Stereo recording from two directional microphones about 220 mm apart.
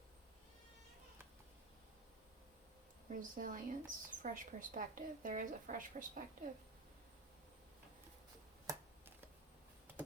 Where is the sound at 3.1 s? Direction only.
35° right (ahead or behind).